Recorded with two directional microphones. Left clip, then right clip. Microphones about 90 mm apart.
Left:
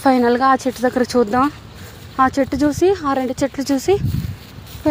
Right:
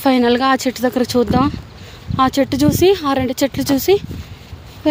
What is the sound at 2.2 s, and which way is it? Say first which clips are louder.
Speech: right 1 dB; 35° right (ahead or behind).